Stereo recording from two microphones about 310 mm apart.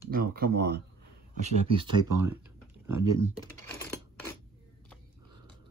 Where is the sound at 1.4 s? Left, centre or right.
Centre.